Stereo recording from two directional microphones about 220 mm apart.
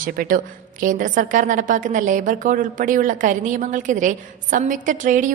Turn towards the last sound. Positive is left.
turn(degrees=-35)  # may be behind; listen again after turning